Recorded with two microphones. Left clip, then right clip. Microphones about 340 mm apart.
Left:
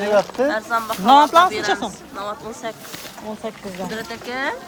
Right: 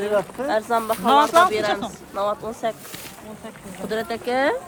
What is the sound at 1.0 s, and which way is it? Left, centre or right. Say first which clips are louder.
Speech: left 4 dB; centre.